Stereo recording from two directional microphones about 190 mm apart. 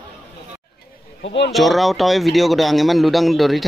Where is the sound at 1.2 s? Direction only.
65° left (ahead or behind).